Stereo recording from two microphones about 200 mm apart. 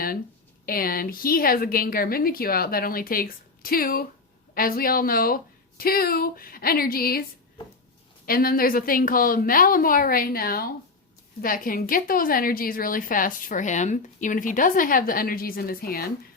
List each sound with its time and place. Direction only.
0.6 s a woman's voice: 45° left (ahead or behind)
8.3 s a woman's voice: 45° left (ahead or behind)